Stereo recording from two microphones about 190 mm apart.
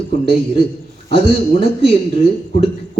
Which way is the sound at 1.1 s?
30° left (ahead or behind).